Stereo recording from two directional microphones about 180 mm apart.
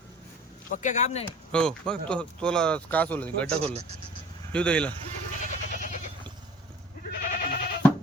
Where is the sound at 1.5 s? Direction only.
5° left (ahead or behind).